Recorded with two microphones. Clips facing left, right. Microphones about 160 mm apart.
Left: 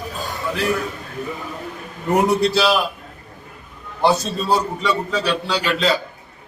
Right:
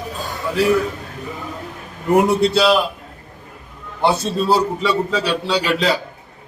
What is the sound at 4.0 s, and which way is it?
A man's voice, centre (ahead or behind).